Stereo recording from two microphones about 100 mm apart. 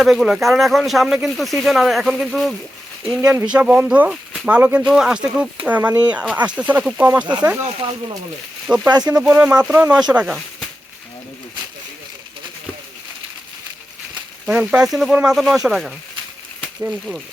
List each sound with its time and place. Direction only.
0.0 s speech: 5° right (ahead or behind)
7.8 s speech: 55° right (ahead or behind)
8.6 s speech: 15° right (ahead or behind)
8.9 s speech: 45° right (ahead or behind)
9.1 s speech: 15° right (ahead or behind)
14.4 s speech: 10° right (ahead or behind)